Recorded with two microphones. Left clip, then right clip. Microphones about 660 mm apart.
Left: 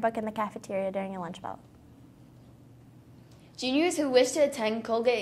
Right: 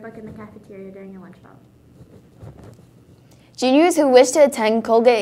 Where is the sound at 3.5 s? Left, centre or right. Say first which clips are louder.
Right 12 dB; right.